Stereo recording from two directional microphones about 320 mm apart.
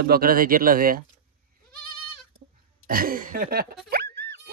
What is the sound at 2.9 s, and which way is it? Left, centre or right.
Speech, right.